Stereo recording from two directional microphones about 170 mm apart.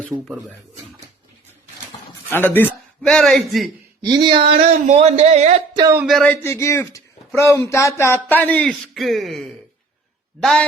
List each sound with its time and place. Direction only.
0.1 s a man's voice: centre (ahead or behind)
2.3 s a man's voice: 10° left (ahead or behind)
4.0 s speech: 25° right (ahead or behind); by 5.6 s 40° right (ahead or behind)
6.1 s speech: 5° left (ahead or behind)